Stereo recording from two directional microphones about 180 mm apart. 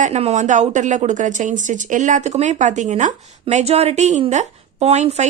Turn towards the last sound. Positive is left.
turn(degrees=-40)  # may be behind; listen again after turning